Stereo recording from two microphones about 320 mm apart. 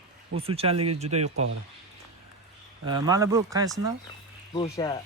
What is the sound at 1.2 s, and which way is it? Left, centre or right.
Speech, right.